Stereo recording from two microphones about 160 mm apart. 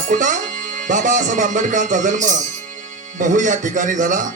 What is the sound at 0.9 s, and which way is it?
A man's voice, 55° right (ahead or behind).